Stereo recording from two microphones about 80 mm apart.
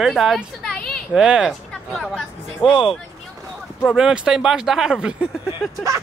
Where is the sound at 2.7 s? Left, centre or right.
Centre.